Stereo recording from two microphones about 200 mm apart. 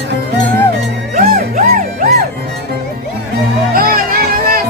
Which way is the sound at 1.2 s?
40° right (ahead or behind).